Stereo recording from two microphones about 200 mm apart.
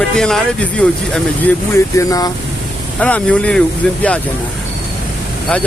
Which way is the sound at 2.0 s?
15° left (ahead or behind).